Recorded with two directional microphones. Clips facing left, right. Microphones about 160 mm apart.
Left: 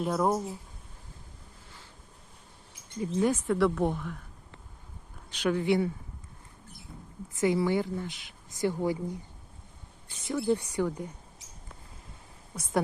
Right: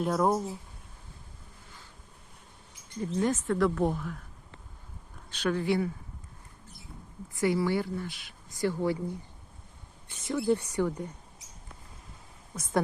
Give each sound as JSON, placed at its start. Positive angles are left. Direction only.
{"t": 0.0, "sound": "speech", "side_deg": 0}
{"t": 3.0, "sound": "speech", "side_deg": 10}
{"t": 5.3, "sound": "speech", "side_deg": 15}
{"t": 7.3, "sound": "speech", "side_deg": 20}
{"t": 10.2, "sound": "speech", "side_deg": 15}